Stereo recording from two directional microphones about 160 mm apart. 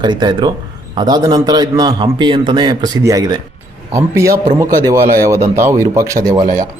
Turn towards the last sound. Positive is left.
turn(degrees=-25)  # may be behind; listen again after turning